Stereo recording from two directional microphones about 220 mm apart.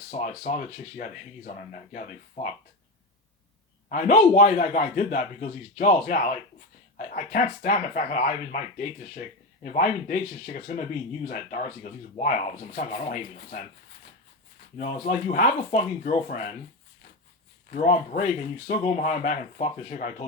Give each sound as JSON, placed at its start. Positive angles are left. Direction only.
{"t": 0.1, "sound": "a man's voice", "side_deg": 35}
{"t": 3.8, "sound": "a man's voice", "side_deg": 35}
{"t": 14.8, "sound": "a man's voice", "side_deg": 35}
{"t": 17.7, "sound": "a man's voice", "side_deg": 35}